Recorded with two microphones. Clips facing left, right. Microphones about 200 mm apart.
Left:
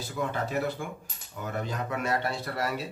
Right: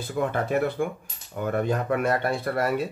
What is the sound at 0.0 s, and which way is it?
Speech, 55° right (ahead or behind).